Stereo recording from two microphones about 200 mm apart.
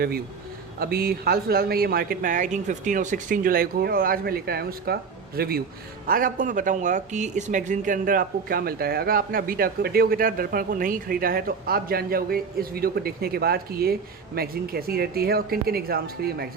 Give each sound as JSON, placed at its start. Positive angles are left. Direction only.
{"t": 0.8, "sound": "speech", "side_deg": -50}